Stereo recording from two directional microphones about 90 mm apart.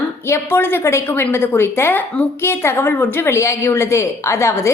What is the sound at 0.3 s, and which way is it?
A woman's voice, 30° left (ahead or behind).